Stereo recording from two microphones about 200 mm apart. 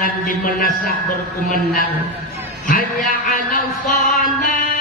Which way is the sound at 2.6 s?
40° left (ahead or behind).